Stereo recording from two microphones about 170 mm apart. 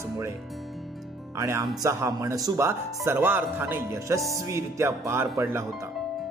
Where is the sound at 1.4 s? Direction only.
15° right (ahead or behind).